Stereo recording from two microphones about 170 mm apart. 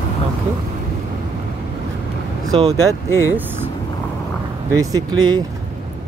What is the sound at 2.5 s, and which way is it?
Speech, 30° right (ahead or behind).